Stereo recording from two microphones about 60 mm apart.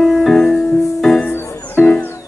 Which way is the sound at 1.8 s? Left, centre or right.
Left.